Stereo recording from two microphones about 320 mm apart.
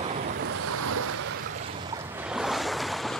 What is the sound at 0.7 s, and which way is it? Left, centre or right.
Waves, right.